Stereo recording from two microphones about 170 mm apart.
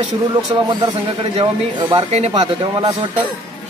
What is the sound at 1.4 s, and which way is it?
Speech, 25° right (ahead or behind).